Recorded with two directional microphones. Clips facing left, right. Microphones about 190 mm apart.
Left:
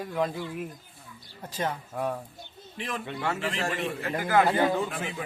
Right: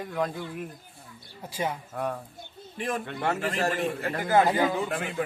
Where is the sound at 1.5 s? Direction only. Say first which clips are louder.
Even; 10° right (ahead or behind).